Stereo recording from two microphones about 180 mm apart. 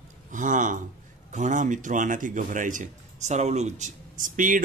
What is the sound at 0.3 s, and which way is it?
Speech, 45° right (ahead or behind).